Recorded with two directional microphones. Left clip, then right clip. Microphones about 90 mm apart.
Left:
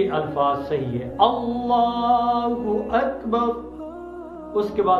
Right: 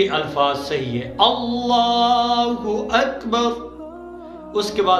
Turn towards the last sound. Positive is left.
turn(degrees=-25)  # may be behind; listen again after turning